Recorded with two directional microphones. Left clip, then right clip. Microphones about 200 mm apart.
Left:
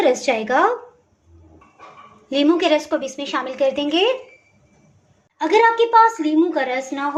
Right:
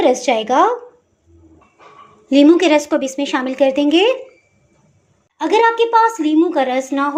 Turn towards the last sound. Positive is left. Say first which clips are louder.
# right 5 dB
turn(degrees=-25)  # may be behind; listen again after turning